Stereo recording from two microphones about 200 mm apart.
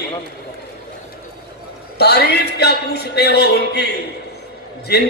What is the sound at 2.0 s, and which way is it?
A man's voice, 55° left (ahead or behind).